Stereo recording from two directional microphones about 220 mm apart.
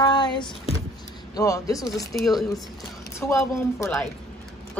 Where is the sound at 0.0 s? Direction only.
20° left (ahead or behind).